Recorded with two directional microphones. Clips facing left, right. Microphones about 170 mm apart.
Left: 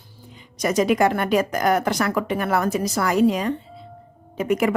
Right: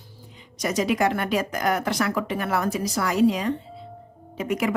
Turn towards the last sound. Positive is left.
turn(degrees=50)  # may be behind; listen again after turning